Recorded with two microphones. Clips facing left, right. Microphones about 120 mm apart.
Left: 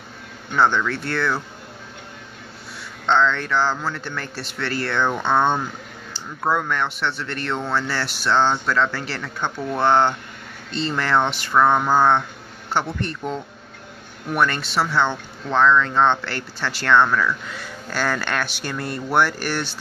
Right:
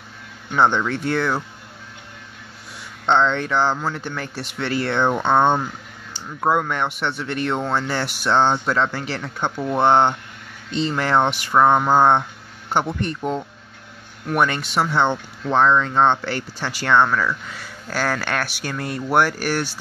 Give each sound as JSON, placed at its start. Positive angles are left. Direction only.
{"t": 0.6, "sound": "speech", "side_deg": -20}
{"t": 3.1, "sound": "speech", "side_deg": -20}